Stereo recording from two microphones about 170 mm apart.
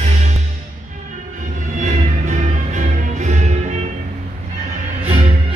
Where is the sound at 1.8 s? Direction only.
45° right (ahead or behind).